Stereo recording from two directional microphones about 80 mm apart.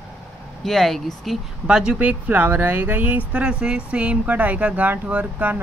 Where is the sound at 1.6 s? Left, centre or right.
Centre.